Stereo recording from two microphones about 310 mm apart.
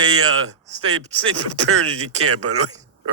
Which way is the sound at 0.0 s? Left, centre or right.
Right.